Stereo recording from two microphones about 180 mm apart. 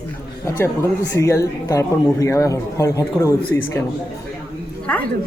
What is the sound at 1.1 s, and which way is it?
Speech, 15° left (ahead or behind).